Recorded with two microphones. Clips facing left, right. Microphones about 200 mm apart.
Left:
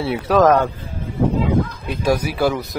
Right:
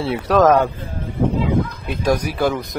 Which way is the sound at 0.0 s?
Centre (ahead or behind).